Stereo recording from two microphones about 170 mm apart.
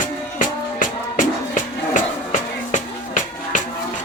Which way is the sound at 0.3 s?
50° left (ahead or behind).